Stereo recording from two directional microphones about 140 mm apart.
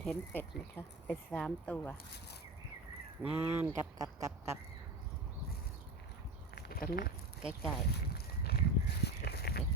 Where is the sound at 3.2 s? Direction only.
10° right (ahead or behind).